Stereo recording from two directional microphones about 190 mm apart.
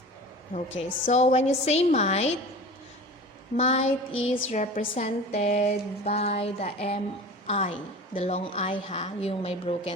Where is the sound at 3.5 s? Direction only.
35° left (ahead or behind).